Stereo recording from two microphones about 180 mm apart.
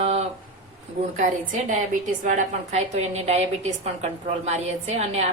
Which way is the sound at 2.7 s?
40° right (ahead or behind).